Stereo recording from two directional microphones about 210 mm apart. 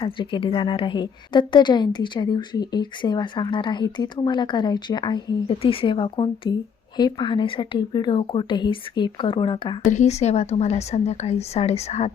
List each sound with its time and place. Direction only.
0.0 s a woman's voice: 25° left (ahead or behind)
9.9 s a woman's voice: 35° left (ahead or behind)